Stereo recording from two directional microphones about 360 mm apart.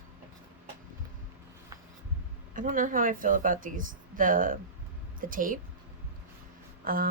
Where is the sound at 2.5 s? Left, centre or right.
Right.